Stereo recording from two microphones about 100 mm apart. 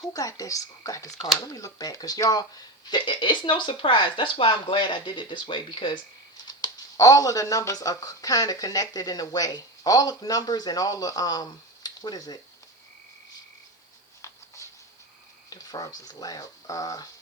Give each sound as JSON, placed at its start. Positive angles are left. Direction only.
{"t": 0.0, "sound": "speech", "side_deg": 35}
{"t": 14.2, "sound": "a sound", "side_deg": 30}
{"t": 15.4, "sound": "speech", "side_deg": 40}